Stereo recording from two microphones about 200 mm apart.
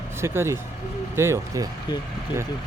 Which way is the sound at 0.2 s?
15° right (ahead or behind).